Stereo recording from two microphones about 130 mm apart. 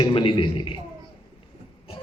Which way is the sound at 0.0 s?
40° left (ahead or behind).